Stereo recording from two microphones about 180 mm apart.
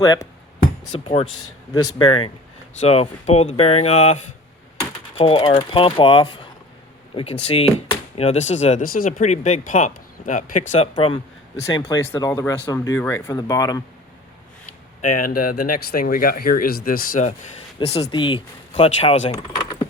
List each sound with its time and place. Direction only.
0.0 s speech: 20° left (ahead or behind)
0.9 s speech: 30° left (ahead or behind)
11.5 s speech: 15° left (ahead or behind)
15.0 s speech: 50° left (ahead or behind)
17.7 s speech: 35° left (ahead or behind)
18.7 s speech: 35° left (ahead or behind)
19.3 s speech: 25° left (ahead or behind)